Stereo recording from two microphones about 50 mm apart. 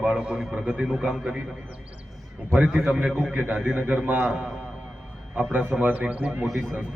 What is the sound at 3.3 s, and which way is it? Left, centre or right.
Speech, right.